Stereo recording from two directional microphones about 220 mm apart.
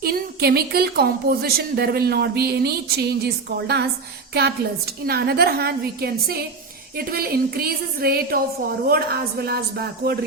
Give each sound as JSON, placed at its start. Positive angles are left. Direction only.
{"t": 0.0, "sound": "a woman's voice", "side_deg": -45}
{"t": 5.0, "sound": "a woman's voice", "side_deg": -45}